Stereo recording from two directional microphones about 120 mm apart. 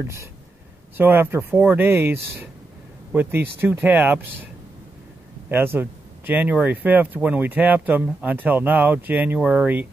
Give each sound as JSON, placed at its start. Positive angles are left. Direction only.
{"t": 0.9, "sound": "speech", "side_deg": -15}
{"t": 5.5, "sound": "speech", "side_deg": -15}